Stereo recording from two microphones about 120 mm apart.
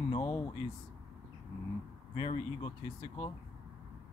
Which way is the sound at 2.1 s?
50° left (ahead or behind).